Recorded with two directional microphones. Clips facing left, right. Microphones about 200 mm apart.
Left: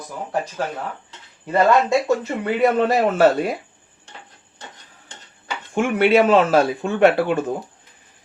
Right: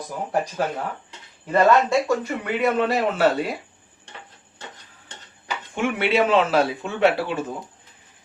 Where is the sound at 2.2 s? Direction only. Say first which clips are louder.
Left 4 dB; 35° left (ahead or behind).